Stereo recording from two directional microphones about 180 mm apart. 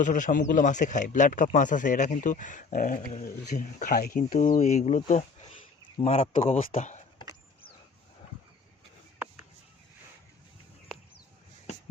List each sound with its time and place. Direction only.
0.0 s speech: 45° left (ahead or behind)
6.7 s speech: 45° left (ahead or behind)
9.1 s a sound: 10° right (ahead or behind)